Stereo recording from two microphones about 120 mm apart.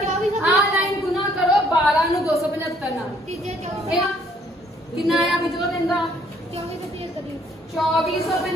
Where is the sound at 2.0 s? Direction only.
25° left (ahead or behind).